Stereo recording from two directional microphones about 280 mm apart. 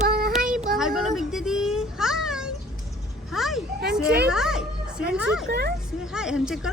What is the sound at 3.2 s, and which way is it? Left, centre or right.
Vehicle, centre.